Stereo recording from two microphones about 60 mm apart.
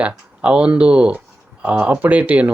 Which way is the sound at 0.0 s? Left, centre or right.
Centre.